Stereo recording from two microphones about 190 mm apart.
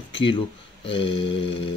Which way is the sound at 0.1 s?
25° left (ahead or behind).